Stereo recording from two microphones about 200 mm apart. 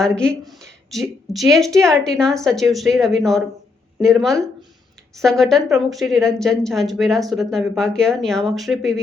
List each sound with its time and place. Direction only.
0.2 s a woman's voice: centre (ahead or behind)